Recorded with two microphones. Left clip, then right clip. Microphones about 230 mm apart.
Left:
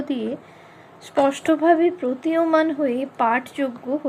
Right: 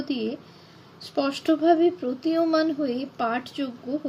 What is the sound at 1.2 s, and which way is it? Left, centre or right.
A woman's voice, centre.